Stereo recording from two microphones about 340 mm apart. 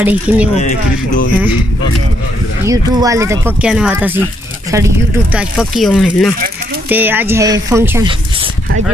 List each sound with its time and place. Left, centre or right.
0.0 s speech: centre
0.6 s speech: left
2.6 s speech: centre